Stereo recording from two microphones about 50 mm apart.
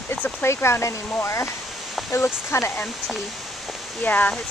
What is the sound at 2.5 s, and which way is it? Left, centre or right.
Speech, left.